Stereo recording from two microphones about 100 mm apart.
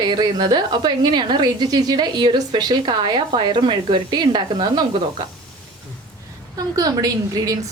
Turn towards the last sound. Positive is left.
turn(degrees=-40)  # may be behind; listen again after turning